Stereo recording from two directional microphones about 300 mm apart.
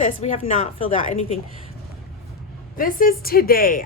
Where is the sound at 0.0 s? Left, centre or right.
Left.